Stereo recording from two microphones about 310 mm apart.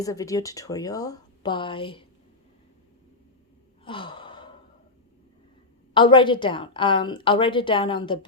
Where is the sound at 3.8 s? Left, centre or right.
Centre.